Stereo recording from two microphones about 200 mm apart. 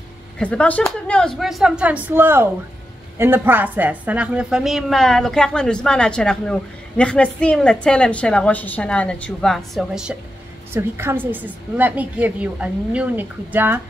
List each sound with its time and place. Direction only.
0.4 s a woman's voice: 5° left (ahead or behind); by 13.7 s 10° right (ahead or behind)